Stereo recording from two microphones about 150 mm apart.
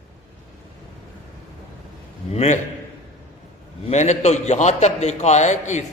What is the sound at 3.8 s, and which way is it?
A man's voice, 50° left (ahead or behind).